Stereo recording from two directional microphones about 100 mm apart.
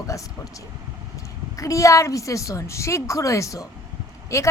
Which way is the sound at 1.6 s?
30° left (ahead or behind).